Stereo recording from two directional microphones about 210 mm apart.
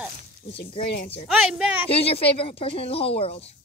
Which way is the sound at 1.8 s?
30° left (ahead or behind).